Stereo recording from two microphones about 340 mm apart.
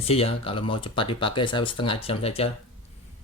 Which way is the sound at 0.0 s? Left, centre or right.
Centre.